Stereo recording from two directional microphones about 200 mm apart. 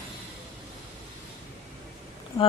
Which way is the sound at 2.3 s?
15° left (ahead or behind).